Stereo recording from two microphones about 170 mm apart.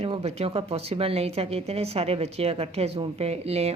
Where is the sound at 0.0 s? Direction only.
35° right (ahead or behind).